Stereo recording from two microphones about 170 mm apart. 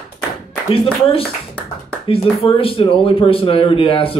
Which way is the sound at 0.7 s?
35° left (ahead or behind).